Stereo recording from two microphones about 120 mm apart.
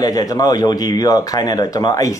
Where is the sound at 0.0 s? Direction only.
30° left (ahead or behind).